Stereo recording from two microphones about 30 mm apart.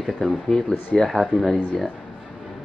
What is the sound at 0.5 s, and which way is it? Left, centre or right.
Speech, left.